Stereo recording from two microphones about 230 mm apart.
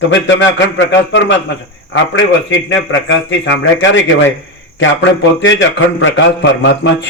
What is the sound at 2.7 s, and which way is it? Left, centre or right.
A man's voice, left.